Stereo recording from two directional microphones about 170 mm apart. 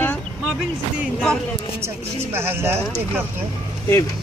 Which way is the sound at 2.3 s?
15° right (ahead or behind).